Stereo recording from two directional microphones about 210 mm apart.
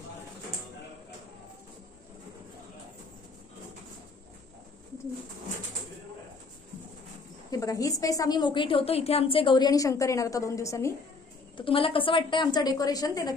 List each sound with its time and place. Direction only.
7.5 s a woman's voice: 15° left (ahead or behind)
11.5 s a woman's voice: 25° left (ahead or behind)